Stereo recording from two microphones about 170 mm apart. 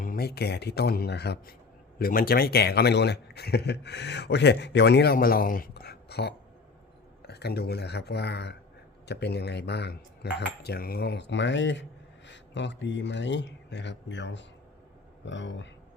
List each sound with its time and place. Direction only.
0.0 s a man's voice: 60° left (ahead or behind)
2.0 s a man's voice: 60° left (ahead or behind); by 15.7 s 90° left